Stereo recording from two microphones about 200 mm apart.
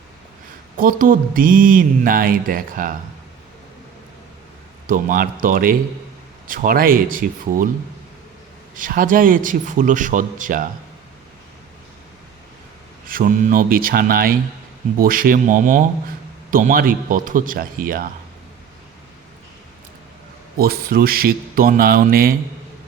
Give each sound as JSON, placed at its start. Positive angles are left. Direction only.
{"t": 0.8, "sound": "speech", "side_deg": -45}
{"t": 4.9, "sound": "speech", "side_deg": -45}
{"t": 8.7, "sound": "a man's voice", "side_deg": -45}
{"t": 13.1, "sound": "speech", "side_deg": -45}
{"t": 20.6, "sound": "speech", "side_deg": -50}